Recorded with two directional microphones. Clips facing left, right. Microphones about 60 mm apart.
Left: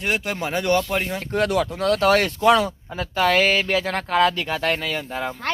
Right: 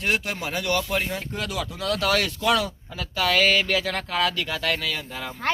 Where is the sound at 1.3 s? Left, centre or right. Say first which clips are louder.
Left 9 dB; left.